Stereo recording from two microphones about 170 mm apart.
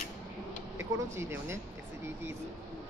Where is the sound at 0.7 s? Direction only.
15° right (ahead or behind).